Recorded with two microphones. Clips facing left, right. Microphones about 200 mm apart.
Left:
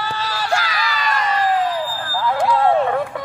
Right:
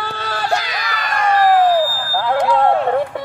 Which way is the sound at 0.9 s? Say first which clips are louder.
Right 5 dB; 55° right (ahead or behind).